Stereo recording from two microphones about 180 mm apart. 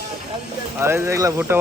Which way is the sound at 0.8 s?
15° right (ahead or behind).